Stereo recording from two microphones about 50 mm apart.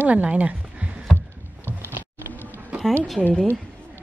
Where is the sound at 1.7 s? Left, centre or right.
Right.